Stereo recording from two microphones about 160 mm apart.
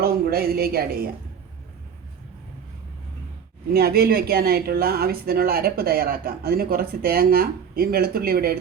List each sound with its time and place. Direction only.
0.0 s speech: 75° right (ahead or behind)
3.7 s speech: 75° right (ahead or behind)